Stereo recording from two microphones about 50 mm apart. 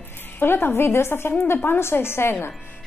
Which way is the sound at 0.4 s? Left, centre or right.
Left.